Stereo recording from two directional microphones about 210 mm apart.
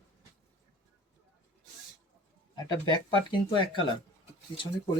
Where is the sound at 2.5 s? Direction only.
20° left (ahead or behind).